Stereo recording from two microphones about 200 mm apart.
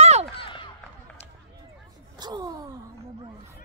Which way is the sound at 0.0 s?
35° right (ahead or behind).